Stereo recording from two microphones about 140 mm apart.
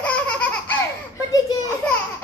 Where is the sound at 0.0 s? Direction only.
10° left (ahead or behind).